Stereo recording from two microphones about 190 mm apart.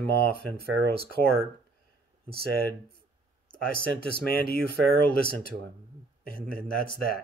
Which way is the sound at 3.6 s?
50° left (ahead or behind).